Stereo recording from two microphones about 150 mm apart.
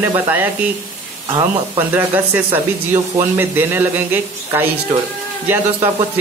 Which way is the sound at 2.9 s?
15° right (ahead or behind).